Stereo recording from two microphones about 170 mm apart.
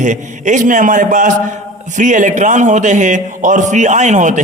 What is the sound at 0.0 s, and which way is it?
A man's voice, 45° right (ahead or behind).